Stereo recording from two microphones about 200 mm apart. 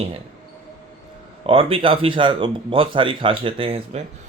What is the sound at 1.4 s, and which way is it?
Speech, 30° right (ahead or behind).